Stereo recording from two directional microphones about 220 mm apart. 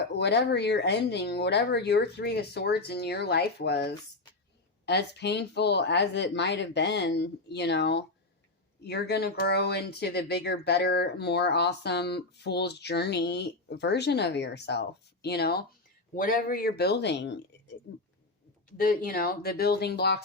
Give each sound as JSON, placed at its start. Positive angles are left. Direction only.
{"t": 0.0, "sound": "speech", "side_deg": 50}
{"t": 18.8, "sound": "speech", "side_deg": 40}